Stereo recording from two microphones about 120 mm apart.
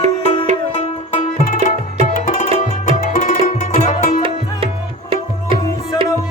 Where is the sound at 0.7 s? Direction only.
85° left.